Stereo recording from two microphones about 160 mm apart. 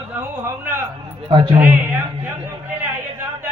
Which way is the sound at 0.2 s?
10° right (ahead or behind).